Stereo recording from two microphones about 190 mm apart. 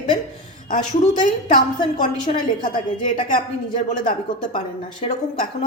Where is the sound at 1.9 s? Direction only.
40° left (ahead or behind).